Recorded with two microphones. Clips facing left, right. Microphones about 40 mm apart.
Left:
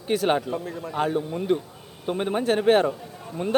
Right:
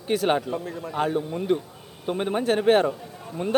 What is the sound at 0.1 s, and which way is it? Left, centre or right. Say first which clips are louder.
Speech: even; centre.